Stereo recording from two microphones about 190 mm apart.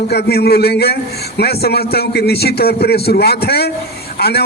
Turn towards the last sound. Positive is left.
turn(degrees=55)  # may be behind; listen again after turning